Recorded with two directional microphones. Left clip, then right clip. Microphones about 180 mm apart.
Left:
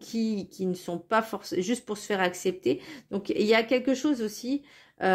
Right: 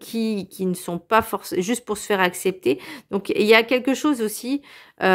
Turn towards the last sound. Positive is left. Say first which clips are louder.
# right 6 dB
turn(degrees=-35)  # may be behind; listen again after turning